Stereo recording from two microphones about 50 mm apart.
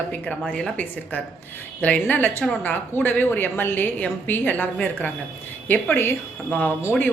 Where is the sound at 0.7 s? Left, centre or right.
Left.